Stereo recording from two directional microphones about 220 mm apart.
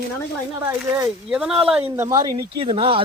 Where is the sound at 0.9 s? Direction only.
10° right (ahead or behind).